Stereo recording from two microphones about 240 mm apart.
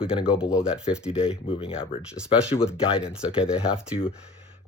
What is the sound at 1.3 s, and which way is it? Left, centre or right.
Speech, left.